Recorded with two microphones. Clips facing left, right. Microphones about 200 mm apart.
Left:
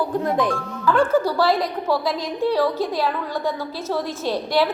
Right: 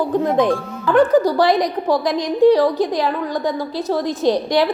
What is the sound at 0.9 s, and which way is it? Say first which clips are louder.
A woman's voice: right 6 dB; 20° right (ahead or behind).